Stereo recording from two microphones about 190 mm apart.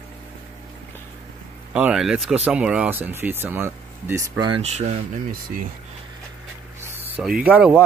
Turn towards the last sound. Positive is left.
turn(degrees=-5)  # may be behind; listen again after turning